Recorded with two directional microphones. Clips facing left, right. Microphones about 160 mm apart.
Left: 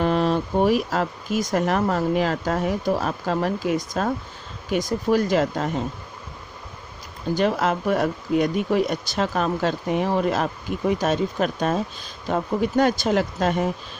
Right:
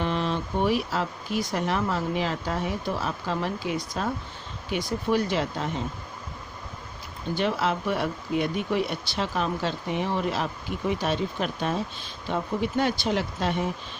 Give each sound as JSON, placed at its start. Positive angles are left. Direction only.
{"t": 0.0, "sound": "speech", "side_deg": 40}
{"t": 7.3, "sound": "speech", "side_deg": 45}